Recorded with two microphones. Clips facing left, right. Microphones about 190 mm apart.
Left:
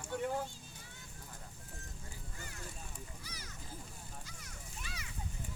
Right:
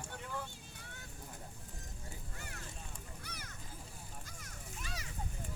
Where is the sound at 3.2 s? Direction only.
55° right (ahead or behind).